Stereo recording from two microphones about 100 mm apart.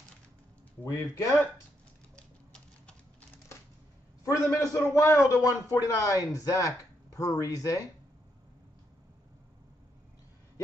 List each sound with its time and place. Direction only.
0.8 s speech: 25° left (ahead or behind)
2.1 s typewriter: 10° left (ahead or behind)
4.2 s speech: 35° left (ahead or behind)